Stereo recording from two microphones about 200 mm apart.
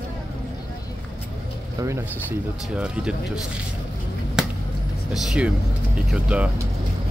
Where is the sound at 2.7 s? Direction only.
5° right (ahead or behind).